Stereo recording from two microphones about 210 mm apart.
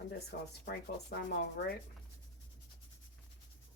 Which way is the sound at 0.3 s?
50° left (ahead or behind).